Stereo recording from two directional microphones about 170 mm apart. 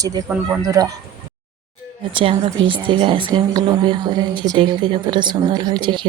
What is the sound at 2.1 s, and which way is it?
Speech, 30° right (ahead or behind).